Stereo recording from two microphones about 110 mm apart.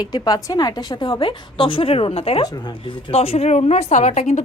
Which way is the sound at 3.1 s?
65° left (ahead or behind).